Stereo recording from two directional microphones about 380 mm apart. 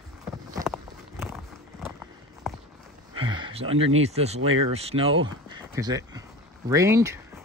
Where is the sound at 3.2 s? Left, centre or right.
Centre.